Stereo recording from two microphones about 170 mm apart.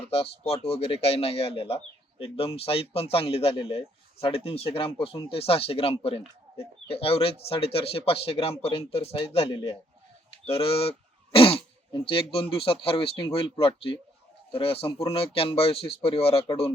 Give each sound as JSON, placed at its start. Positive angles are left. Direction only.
{"t": 0.1, "sound": "speech", "side_deg": 35}